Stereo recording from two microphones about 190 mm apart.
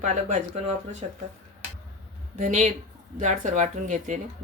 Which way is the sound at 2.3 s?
40° right (ahead or behind).